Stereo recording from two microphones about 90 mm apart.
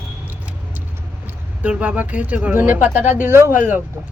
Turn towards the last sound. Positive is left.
turn(degrees=-20)  # may be behind; listen again after turning